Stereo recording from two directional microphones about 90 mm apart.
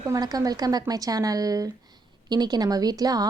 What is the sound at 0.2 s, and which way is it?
A woman's voice, 45° right (ahead or behind).